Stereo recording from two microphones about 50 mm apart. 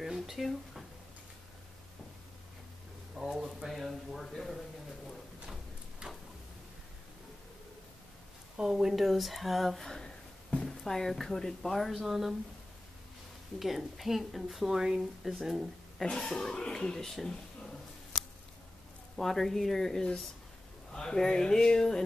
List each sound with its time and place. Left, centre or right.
0.0 s a sound: centre
3.2 s speech: centre
6.0 s a sound: centre
8.5 s a woman's voice: centre
9.8 s a sound: centre
10.9 s a woman's voice: centre
13.6 s a woman's voice: centre
15.0 s a woman's voice: centre
15.4 s speech: centre
16.0 s speech: centre
19.1 s speech: centre